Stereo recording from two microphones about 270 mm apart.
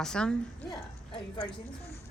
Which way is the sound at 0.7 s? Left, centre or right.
Centre.